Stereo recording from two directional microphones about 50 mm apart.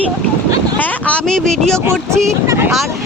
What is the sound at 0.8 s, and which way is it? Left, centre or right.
Speech, left.